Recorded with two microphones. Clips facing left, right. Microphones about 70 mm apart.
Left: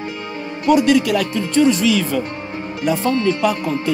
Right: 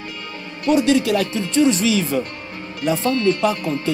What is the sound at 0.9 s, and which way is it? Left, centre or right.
Music, right.